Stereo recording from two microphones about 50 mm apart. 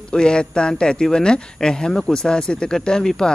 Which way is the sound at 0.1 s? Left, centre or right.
Centre.